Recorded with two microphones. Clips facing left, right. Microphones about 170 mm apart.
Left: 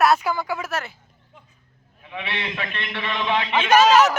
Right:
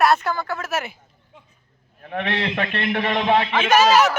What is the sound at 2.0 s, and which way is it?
A man's voice, 50° right (ahead or behind).